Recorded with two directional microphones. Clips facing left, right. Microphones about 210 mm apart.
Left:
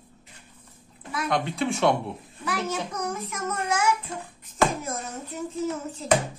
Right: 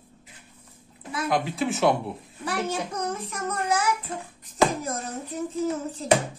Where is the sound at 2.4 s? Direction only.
30° right (ahead or behind).